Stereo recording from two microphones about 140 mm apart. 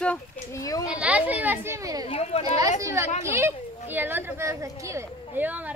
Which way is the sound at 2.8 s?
20° right (ahead or behind).